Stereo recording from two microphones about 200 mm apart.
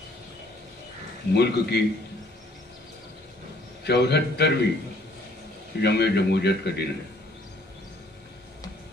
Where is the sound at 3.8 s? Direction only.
55° left (ahead or behind).